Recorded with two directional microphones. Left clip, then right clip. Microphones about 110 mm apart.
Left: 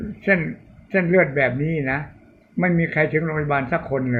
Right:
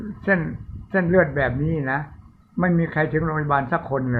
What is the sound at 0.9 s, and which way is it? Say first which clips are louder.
A man's voice: left 1 dB; 15° right (ahead or behind).